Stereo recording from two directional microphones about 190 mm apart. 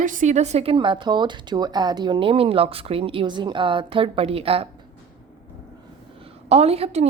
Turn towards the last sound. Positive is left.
turn(degrees=-30)  # may be behind; listen again after turning